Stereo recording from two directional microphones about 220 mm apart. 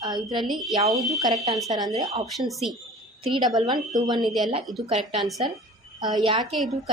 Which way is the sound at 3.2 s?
20° right (ahead or behind).